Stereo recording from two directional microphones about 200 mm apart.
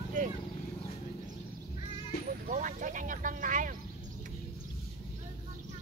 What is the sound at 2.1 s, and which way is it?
Vehicle, 50° left (ahead or behind).